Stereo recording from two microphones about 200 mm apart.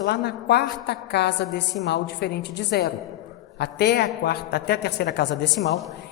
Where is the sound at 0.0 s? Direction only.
55° left (ahead or behind).